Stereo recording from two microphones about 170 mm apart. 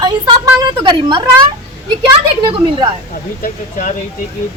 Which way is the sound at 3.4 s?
50° left (ahead or behind).